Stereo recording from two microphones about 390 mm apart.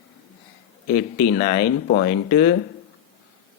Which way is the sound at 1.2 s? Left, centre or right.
Left.